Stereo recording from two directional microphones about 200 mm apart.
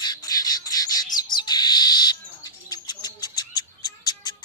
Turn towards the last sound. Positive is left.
turn(degrees=20)  # may be behind; listen again after turning